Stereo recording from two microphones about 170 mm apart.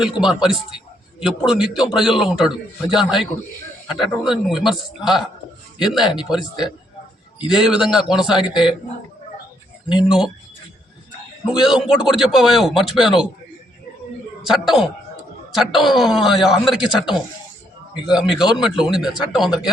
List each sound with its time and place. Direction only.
0.0 s a man's voice: 5° right (ahead or behind)
7.6 s a man's voice: 5° right (ahead or behind)
8.4 s speech: 25° left (ahead or behind)
10.0 s a man's voice: 5° right (ahead or behind)
11.4 s a man's voice: 5° right (ahead or behind)
14.4 s a man's voice: centre (ahead or behind)
17.9 s a man's voice: 5° right (ahead or behind)